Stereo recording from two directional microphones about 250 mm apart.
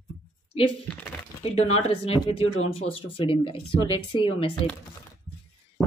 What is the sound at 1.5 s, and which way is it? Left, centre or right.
A woman's voice, left.